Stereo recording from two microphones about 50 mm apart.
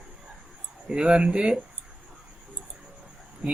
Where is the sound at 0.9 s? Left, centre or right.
Right.